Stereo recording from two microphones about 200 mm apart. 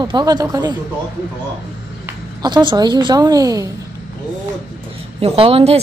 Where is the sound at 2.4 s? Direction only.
25° right (ahead or behind).